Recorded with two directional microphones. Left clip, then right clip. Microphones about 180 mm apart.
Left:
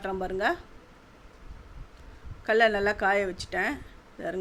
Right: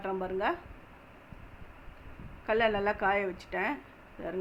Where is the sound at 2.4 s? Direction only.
25° left (ahead or behind).